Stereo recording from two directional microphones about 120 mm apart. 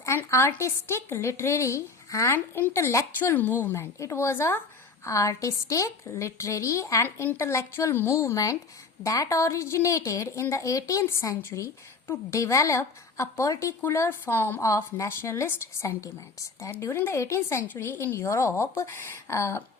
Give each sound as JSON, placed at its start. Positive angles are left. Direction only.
{"t": 0.0, "sound": "speech", "side_deg": 25}